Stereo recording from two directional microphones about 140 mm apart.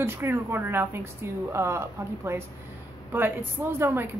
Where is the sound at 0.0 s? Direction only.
15° right (ahead or behind).